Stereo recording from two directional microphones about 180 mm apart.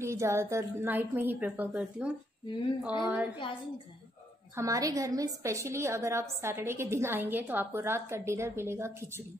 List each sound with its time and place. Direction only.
0.0 s a woman's voice: 15° right (ahead or behind)
3.3 s a woman's voice: 30° left (ahead or behind)
4.6 s a woman's voice: 20° right (ahead or behind)